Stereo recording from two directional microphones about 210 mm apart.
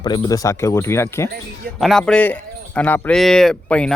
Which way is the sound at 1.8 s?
Centre (ahead or behind).